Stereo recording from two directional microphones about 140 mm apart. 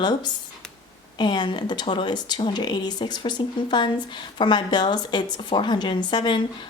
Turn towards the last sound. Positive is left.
turn(degrees=35)  # may be behind; listen again after turning